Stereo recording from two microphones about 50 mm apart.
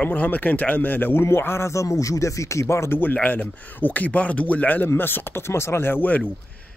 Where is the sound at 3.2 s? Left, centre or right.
Left.